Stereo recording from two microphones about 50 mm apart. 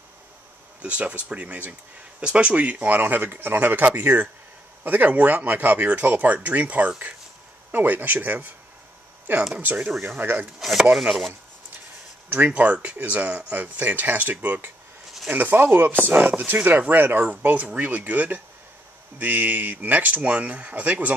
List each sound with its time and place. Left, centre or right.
0.8 s speech: right
9.5 s speech: right
10.0 s speech: right
10.6 s speech: centre
12.3 s speech: right